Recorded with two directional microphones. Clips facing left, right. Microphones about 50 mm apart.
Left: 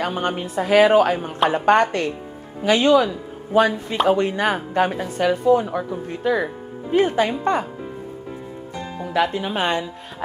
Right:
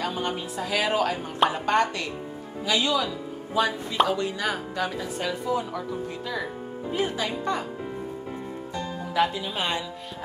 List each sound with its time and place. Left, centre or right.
0.0 s speech: left
9.0 s speech: left